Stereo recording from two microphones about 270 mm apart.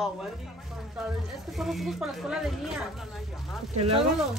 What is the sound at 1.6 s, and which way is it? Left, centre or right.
Speech, centre.